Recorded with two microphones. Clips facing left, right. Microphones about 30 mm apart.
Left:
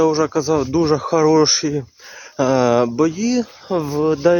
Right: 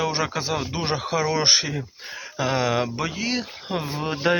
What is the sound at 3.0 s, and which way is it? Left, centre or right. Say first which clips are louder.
Speech: left 9 dB; right.